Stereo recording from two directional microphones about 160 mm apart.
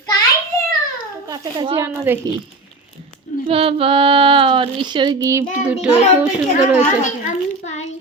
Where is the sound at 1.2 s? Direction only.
25° right (ahead or behind).